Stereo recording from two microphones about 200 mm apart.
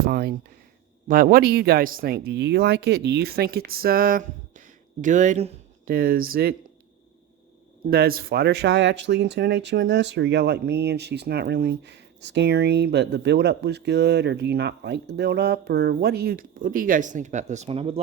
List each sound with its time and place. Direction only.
0.0 s speech: 50° right (ahead or behind); by 5.9 s 35° right (ahead or behind)
5.9 s speech: 45° right (ahead or behind)
7.9 s speech: 50° right (ahead or behind); by 18.0 s 30° right (ahead or behind)